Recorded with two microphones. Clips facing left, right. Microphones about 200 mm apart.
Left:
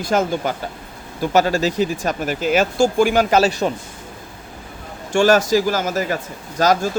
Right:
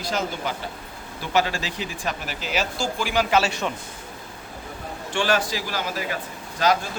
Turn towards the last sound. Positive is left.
turn(degrees=40)  # may be behind; listen again after turning